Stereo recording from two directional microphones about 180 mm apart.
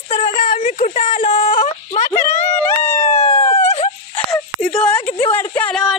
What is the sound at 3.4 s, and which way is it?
Wail, 35° left (ahead or behind).